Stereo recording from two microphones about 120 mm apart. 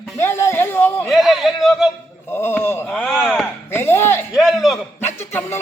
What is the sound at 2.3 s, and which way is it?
Speech, 20° left (ahead or behind).